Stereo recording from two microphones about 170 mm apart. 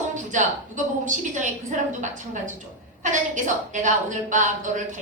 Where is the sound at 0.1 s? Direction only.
45° right (ahead or behind).